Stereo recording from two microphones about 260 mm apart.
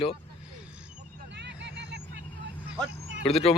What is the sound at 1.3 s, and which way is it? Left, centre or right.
Vehicle, right.